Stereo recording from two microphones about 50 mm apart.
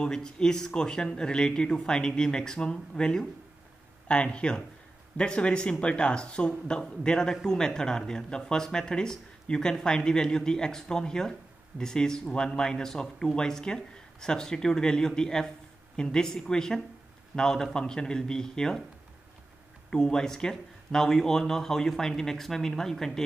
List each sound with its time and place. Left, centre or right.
0.0 s speech: centre
19.9 s speech: centre